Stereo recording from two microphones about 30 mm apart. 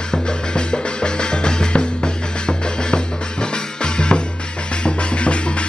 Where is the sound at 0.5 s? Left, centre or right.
Left.